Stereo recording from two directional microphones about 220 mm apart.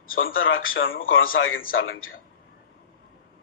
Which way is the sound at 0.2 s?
65° left (ahead or behind).